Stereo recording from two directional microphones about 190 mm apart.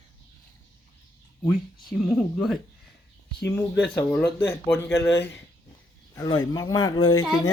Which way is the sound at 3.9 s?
10° left (ahead or behind).